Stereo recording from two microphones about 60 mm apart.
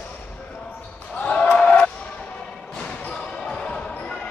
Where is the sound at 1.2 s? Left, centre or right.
Centre.